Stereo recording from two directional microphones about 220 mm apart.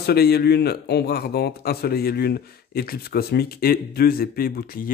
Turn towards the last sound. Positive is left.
turn(degrees=40)  # may be behind; listen again after turning